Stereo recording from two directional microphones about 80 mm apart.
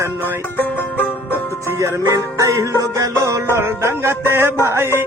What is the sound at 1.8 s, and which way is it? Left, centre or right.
Music, right.